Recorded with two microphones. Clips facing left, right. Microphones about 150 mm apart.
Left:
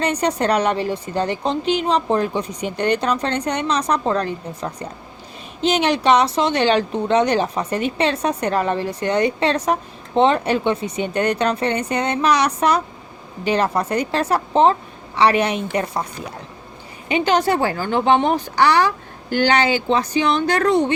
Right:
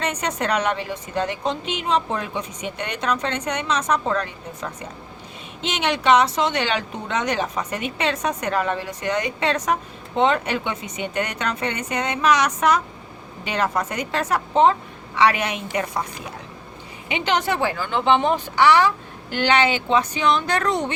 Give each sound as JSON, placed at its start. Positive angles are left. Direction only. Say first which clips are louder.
{"t": 0.0, "sound": "a woman's voice", "louder": "left 5 dB", "side_deg": 35}
{"t": 17.1, "sound": "a woman's voice", "louder": "left 5 dB", "side_deg": 35}